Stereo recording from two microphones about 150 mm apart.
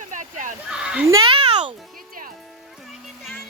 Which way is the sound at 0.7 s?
5° right (ahead or behind).